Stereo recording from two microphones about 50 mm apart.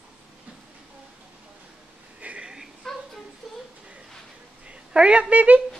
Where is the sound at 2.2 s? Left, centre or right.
Right.